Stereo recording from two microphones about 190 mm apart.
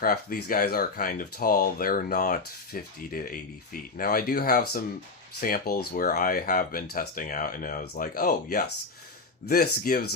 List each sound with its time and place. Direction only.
0.0 s speech: 50° left (ahead or behind)